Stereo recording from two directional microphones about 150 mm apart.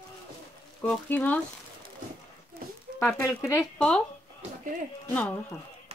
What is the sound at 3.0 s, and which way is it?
Speech, 20° left (ahead or behind).